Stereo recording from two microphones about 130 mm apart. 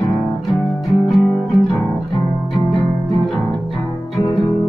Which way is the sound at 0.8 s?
Centre (ahead or behind).